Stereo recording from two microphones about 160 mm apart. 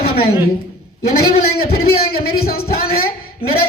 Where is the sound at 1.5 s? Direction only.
70° left (ahead or behind).